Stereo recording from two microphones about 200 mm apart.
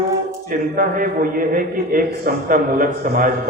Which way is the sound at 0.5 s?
45° right (ahead or behind).